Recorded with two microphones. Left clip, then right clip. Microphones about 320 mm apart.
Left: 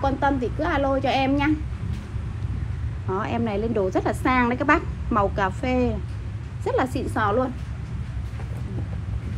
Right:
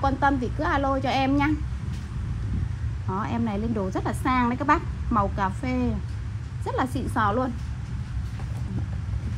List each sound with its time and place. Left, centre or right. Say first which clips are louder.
0.0 s a woman's voice: left 1 dB; right
3.1 s a woman's voice: left 3 dB; centre